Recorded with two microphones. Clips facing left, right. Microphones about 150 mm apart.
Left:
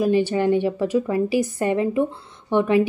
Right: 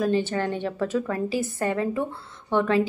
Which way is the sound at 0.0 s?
10° left (ahead or behind).